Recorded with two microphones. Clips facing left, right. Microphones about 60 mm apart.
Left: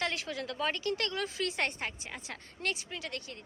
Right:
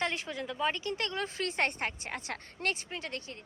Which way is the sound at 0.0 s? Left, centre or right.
Right.